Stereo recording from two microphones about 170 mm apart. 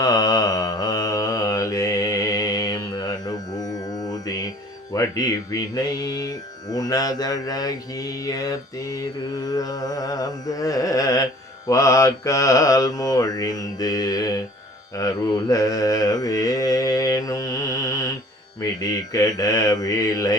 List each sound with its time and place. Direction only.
0.0 s mantra: 20° left (ahead or behind)
4.9 s speech: 20° left (ahead or behind)
14.9 s mantra: 20° left (ahead or behind)
18.6 s speech: 20° left (ahead or behind)